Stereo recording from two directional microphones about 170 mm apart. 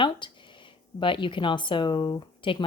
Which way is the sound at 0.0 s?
30° left (ahead or behind).